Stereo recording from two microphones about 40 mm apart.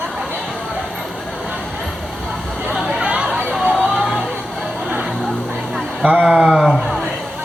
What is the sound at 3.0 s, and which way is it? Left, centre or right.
Chatter, right.